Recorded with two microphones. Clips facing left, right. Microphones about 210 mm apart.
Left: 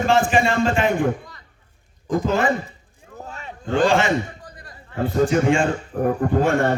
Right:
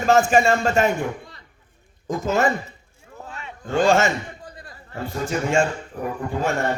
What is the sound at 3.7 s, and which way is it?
Speech, 45° right (ahead or behind).